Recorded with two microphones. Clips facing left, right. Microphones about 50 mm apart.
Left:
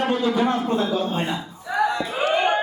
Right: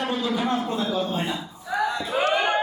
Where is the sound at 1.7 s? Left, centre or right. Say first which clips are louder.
Left 3 dB; left.